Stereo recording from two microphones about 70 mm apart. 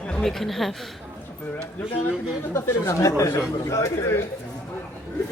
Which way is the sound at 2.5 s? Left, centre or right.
Left.